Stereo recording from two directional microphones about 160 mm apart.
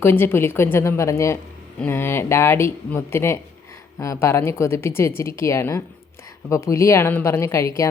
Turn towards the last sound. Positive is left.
turn(degrees=20)  # may be behind; listen again after turning